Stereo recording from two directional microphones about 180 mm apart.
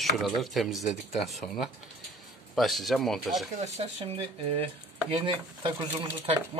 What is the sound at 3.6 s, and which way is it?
Speech, 35° right (ahead or behind).